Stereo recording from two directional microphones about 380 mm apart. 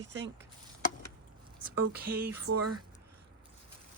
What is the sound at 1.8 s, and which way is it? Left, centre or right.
Speech, right.